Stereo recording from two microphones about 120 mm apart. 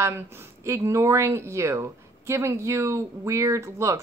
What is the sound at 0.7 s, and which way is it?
A woman's voice, 25° right (ahead or behind).